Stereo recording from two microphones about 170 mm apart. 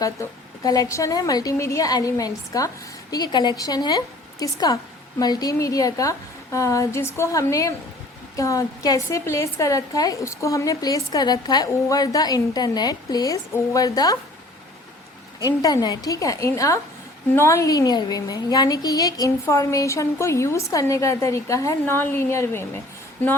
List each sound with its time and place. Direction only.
0.0 s a woman's voice: 20° left (ahead or behind)
15.4 s a woman's voice: 20° left (ahead or behind)